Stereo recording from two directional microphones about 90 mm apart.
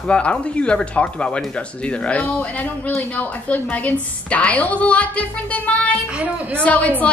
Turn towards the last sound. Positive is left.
turn(degrees=15)  # may be behind; listen again after turning